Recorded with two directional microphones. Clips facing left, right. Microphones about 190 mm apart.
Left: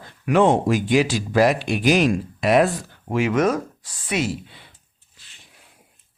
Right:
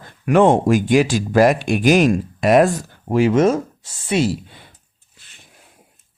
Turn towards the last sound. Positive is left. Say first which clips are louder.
# right 5 dB
turn(degrees=-30)  # may be behind; listen again after turning